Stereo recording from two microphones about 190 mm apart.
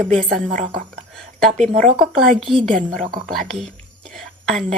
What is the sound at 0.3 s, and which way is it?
Speech, 40° right (ahead or behind).